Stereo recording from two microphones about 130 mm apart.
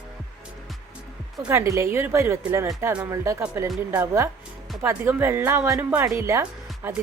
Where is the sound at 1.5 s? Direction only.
20° right (ahead or behind).